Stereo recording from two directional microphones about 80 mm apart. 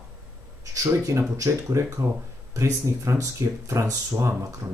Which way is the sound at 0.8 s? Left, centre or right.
Right.